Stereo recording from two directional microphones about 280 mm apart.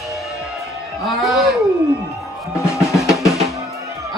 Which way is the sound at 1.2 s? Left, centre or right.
Centre.